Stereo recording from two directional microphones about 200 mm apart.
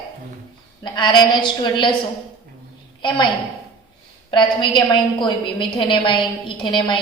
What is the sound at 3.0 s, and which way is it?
Speech, 25° left (ahead or behind).